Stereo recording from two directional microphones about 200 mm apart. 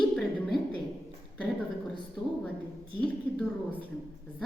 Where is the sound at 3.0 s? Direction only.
5° left (ahead or behind).